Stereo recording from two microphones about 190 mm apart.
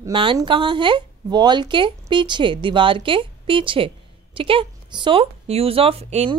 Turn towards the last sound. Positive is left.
turn(degrees=-35)  # may be behind; listen again after turning